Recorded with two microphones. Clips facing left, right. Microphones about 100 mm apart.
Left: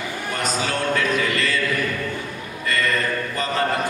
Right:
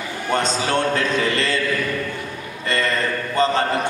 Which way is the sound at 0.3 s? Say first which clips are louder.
Right 5 dB; 30° right (ahead or behind).